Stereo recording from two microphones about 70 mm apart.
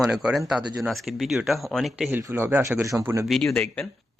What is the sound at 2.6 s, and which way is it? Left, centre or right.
Speech, right.